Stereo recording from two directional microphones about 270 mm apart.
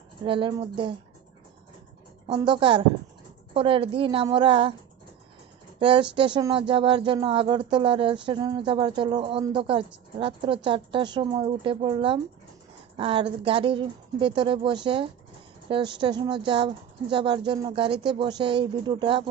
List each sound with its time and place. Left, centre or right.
0.2 s speech: centre
2.2 s speech: centre
3.5 s a sound: right
5.8 s a woman's voice: centre
6.7 s a sound: centre
15.7 s speech: centre